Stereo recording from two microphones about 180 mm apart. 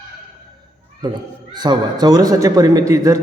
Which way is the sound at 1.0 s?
25° right (ahead or behind).